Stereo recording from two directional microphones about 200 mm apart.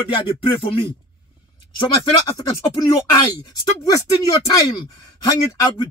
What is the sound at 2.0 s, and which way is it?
Speech, 20° left (ahead or behind).